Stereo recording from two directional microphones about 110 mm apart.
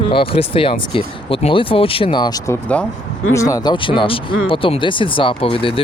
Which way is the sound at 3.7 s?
50° left (ahead or behind).